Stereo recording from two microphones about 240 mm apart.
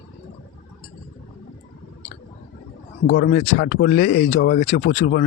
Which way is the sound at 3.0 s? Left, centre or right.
Left.